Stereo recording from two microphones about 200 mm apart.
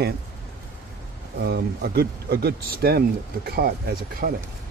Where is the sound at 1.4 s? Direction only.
50° right (ahead or behind).